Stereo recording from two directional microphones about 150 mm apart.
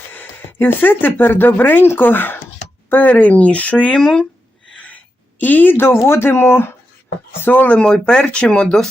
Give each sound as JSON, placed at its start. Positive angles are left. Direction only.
{"t": 0.1, "sound": "speech", "side_deg": 10}